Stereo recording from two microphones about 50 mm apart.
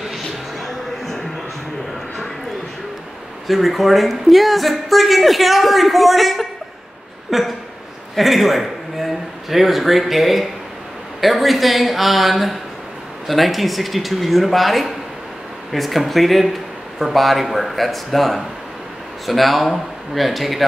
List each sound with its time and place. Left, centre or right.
0.1 s music: centre
3.4 s a man's voice: centre